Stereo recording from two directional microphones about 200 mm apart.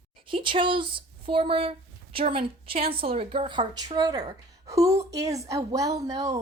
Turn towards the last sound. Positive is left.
turn(degrees=-15)  # may be behind; listen again after turning